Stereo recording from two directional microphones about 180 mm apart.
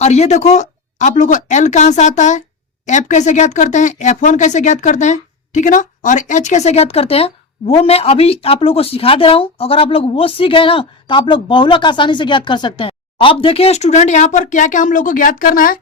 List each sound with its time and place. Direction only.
0.0 s speech: 40° left (ahead or behind)